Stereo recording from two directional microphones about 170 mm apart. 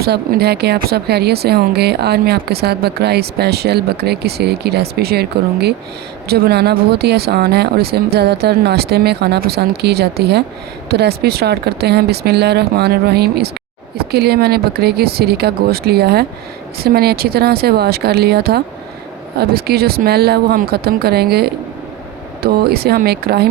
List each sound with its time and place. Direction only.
0.0 s speech: 65° right (ahead or behind)